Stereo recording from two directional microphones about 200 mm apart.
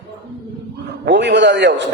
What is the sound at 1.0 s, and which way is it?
Speech, 60° right (ahead or behind).